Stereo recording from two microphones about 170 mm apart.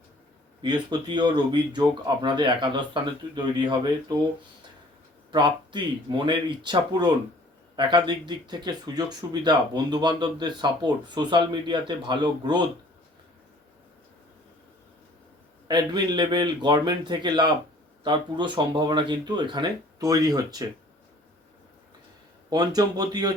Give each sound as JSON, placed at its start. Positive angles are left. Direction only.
{"t": 0.6, "sound": "speech", "side_deg": -25}
{"t": 5.3, "sound": "speech", "side_deg": -25}
{"t": 15.6, "sound": "speech", "side_deg": -25}
{"t": 22.4, "sound": "speech", "side_deg": -25}